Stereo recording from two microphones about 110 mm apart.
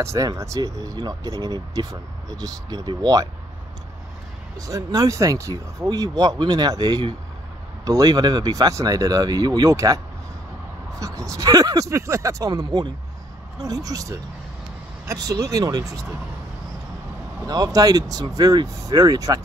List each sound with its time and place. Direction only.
0.0 s speech: 30° right (ahead or behind)
4.6 s speech: 30° right (ahead or behind)
11.0 s speech: 30° right (ahead or behind)
17.4 s speech: 35° right (ahead or behind)